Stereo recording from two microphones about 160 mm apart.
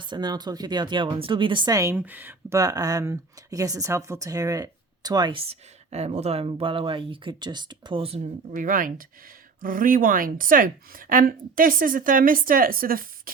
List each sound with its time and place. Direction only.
0.0 s speech: 25° right (ahead or behind)
8.5 s speech: 55° right (ahead or behind)